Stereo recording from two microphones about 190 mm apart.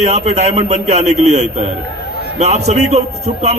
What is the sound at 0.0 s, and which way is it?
A man's voice, 35° right (ahead or behind).